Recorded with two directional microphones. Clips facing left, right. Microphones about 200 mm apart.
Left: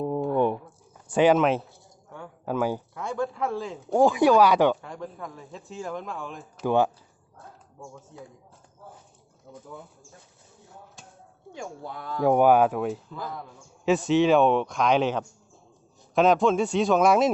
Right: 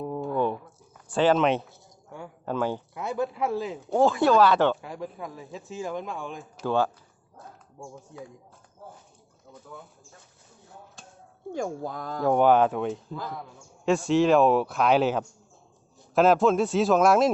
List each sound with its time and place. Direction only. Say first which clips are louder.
0.3 s a sound: left 2 dB; 15° left (ahead or behind)
1.1 s a man's voice: left 2 dB; 10° left (ahead or behind)
2.9 s a man's voice: even; 5° right (ahead or behind)
3.9 s speech: left 2 dB; 15° left (ahead or behind)
4.8 s speech: right 1 dB; 5° right (ahead or behind)
6.7 s speech: left 3 dB; 20° left (ahead or behind)
9.5 s bird: left 4 dB; 10° left (ahead or behind)
11.5 s speech: right 6 dB; 45° right (ahead or behind)
12.2 s speech: left 1 dB; 10° left (ahead or behind)